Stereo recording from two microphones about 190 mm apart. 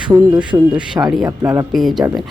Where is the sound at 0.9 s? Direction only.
15° right (ahead or behind).